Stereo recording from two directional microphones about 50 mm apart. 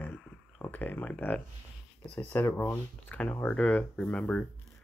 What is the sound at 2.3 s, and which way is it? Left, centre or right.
Speech, left.